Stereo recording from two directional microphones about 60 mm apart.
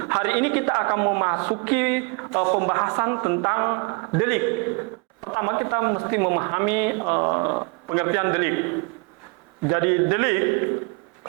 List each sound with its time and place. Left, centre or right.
0.0 s a woman's voice: right